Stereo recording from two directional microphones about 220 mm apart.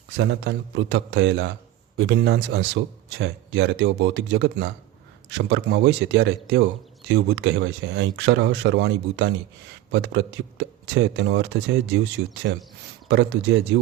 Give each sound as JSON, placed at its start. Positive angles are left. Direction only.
{"t": 0.2, "sound": "a man's voice", "side_deg": -55}